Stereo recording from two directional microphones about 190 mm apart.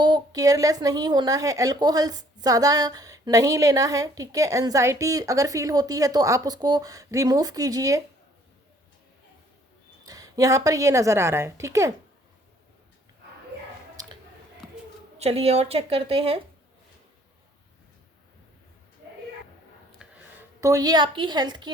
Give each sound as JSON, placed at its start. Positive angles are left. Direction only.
{"t": 0.0, "sound": "a woman's voice", "side_deg": -20}
{"t": 10.1, "sound": "a woman's voice", "side_deg": -20}
{"t": 13.9, "sound": "a sound", "side_deg": -20}
{"t": 15.2, "sound": "a woman's voice", "side_deg": -30}
{"t": 20.0, "sound": "a sound", "side_deg": -5}
{"t": 20.6, "sound": "a woman's voice", "side_deg": -15}